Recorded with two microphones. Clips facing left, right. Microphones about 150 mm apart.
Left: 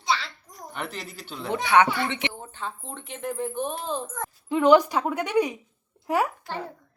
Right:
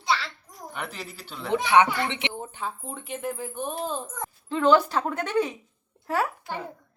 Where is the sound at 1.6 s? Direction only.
15° right (ahead or behind).